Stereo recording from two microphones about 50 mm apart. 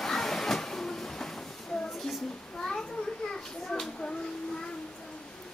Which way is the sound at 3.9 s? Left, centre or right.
Centre.